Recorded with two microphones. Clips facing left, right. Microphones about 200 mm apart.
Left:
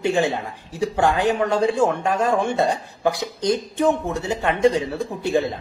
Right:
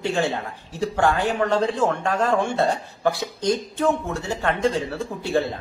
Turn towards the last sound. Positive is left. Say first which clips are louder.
# left 2 dB
turn(degrees=15)  # may be behind; listen again after turning